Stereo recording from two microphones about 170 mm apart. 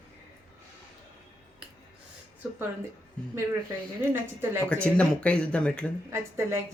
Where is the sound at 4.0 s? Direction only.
15° right (ahead or behind).